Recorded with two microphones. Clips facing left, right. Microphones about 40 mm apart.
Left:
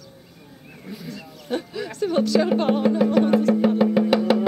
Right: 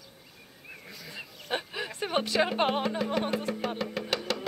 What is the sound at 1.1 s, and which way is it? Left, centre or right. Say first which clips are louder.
Speech: left 5 dB; right.